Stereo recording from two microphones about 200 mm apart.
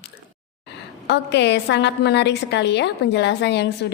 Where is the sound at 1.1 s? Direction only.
60° left (ahead or behind).